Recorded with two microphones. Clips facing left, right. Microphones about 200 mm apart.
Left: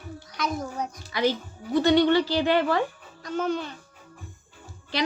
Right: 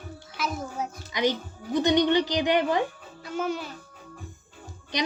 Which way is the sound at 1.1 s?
20° right (ahead or behind).